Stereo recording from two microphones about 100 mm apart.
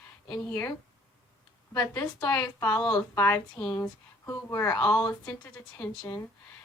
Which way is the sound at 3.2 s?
25° left (ahead or behind).